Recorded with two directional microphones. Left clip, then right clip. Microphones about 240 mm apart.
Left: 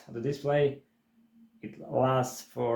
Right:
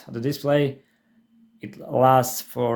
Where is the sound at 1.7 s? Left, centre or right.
Right.